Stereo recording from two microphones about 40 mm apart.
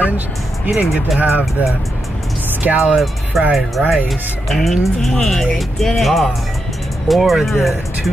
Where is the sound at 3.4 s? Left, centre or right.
Centre.